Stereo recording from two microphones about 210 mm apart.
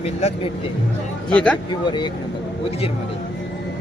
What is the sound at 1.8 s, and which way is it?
Speech, 20° left (ahead or behind).